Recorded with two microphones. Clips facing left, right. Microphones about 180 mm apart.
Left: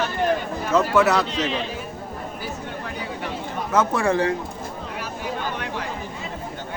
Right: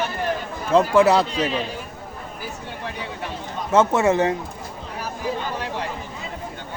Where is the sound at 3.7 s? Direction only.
25° right (ahead or behind).